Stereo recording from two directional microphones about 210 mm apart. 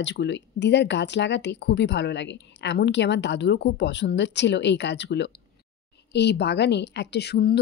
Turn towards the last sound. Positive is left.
turn(degrees=50)  # may be behind; listen again after turning